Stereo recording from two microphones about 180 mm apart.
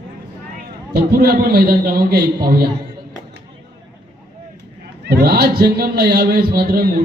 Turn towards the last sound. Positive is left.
turn(degrees=-55)  # may be behind; listen again after turning